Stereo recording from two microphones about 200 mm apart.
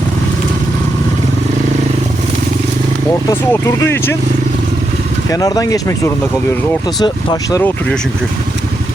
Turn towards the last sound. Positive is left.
turn(degrees=15)  # may be behind; listen again after turning